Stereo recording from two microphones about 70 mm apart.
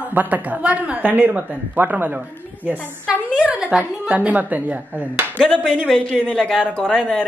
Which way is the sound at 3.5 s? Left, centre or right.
Centre.